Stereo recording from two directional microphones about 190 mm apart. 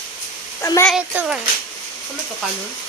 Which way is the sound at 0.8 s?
5° right (ahead or behind).